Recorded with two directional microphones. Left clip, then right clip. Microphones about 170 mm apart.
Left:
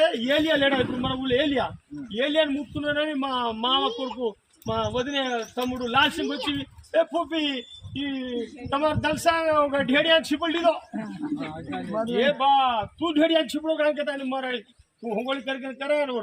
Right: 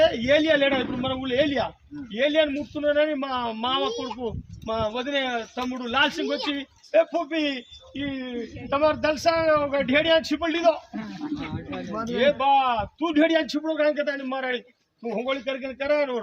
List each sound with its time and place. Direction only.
0.0 s a man's voice: 10° right (ahead or behind)
8.7 s a man's voice: 15° right (ahead or behind)
10.9 s speech: 55° left (ahead or behind)
12.4 s a man's voice: 15° right (ahead or behind)